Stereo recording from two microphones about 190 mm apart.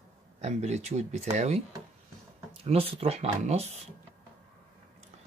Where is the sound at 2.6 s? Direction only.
30° right (ahead or behind).